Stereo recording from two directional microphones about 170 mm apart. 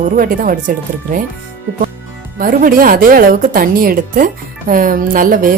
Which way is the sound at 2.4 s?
55° right (ahead or behind).